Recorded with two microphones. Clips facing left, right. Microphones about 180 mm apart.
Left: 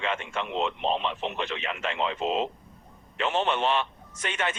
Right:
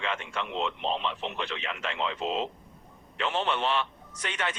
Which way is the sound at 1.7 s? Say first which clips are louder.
Left 4 dB; 25° left (ahead or behind).